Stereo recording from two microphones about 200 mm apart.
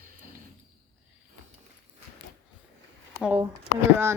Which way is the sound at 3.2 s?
10° right (ahead or behind).